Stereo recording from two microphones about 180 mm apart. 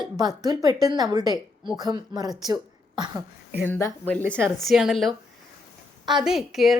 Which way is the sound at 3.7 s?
15° left (ahead or behind).